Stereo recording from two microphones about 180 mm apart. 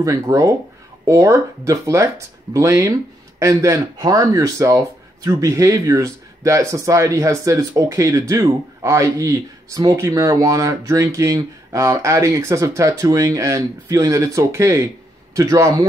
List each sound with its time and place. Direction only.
0.0 s speech: 20° right (ahead or behind)